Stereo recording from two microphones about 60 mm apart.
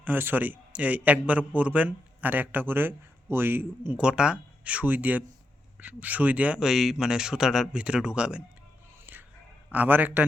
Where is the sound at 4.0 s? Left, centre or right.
Centre.